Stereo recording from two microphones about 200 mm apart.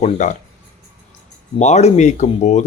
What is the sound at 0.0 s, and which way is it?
Speech, 40° left (ahead or behind).